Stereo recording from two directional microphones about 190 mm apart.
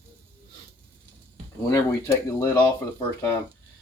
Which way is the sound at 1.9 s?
15° left (ahead or behind).